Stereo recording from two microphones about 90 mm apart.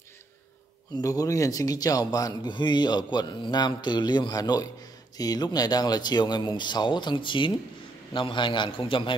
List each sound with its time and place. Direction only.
0.9 s a man's voice: 40° left (ahead or behind)
2.5 s a man's voice: 55° left (ahead or behind)